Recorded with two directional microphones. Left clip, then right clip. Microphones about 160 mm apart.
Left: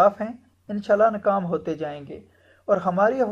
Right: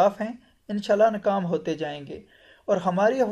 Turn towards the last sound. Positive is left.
turn(degrees=0)  # may be behind; listen again after turning